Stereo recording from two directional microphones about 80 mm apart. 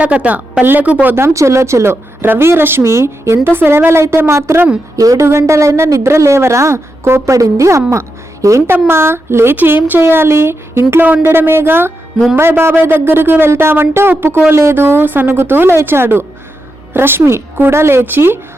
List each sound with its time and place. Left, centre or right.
0.0 s a woman's voice: centre
1.1 s a woman's voice: right